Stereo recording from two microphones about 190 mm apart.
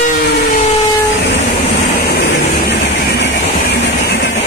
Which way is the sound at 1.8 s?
55° left (ahead or behind).